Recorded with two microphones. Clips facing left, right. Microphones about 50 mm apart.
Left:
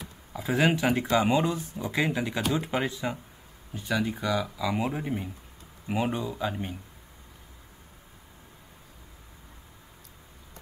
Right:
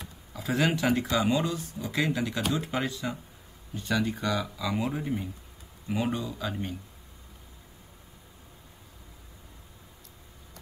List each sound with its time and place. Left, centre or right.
0.3 s a sound: left
0.6 s speech: centre
1.2 s speech: left
3.7 s speech: centre